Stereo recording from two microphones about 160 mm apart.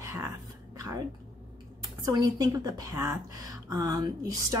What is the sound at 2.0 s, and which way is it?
A woman's voice, 25° right (ahead or behind).